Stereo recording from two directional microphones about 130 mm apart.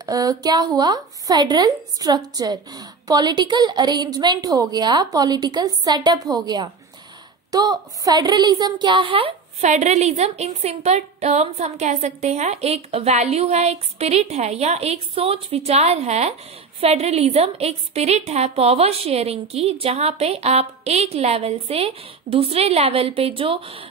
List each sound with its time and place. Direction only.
0.0 s a woman's voice: 30° right (ahead or behind); by 9.7 s 45° right (ahead or behind)
9.7 s a woman's voice: 65° right (ahead or behind); by 23.9 s 45° right (ahead or behind)